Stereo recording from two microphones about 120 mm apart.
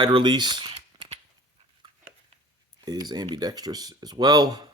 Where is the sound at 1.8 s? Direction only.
40° right (ahead or behind).